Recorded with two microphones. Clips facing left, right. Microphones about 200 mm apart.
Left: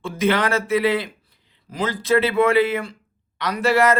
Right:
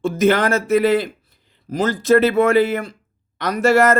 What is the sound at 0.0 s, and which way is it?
Speech, 45° right (ahead or behind).